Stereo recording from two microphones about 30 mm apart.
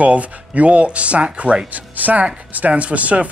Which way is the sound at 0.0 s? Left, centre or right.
Right.